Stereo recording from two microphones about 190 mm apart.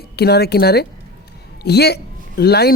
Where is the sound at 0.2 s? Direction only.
55° left (ahead or behind).